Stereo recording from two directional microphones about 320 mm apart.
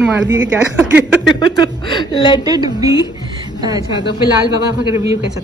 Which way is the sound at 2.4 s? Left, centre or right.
Centre.